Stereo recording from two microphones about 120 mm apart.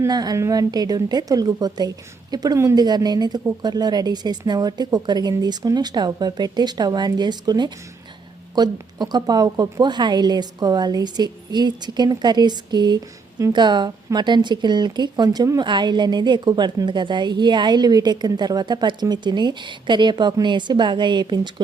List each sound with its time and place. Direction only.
0.1 s speech: 35° right (ahead or behind)